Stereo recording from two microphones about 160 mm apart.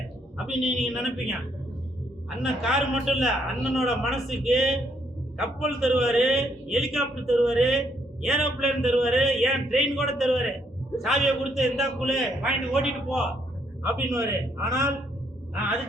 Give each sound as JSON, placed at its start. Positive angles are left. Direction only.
{"t": 0.3, "sound": "a man's voice", "side_deg": -5}
{"t": 2.4, "sound": "a man's voice", "side_deg": 0}
{"t": 13.8, "sound": "a man's voice", "side_deg": -15}